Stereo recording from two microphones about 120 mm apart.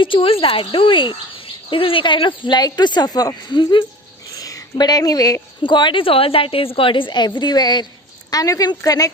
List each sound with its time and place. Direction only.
0.0 s a woman's voice: 45° left (ahead or behind); by 9.0 s 30° left (ahead or behind)